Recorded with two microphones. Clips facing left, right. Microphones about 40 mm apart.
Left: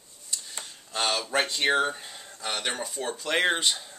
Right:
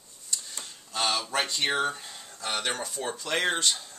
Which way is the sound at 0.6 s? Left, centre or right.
Centre.